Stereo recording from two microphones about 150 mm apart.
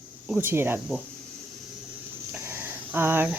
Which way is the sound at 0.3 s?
15° right (ahead or behind).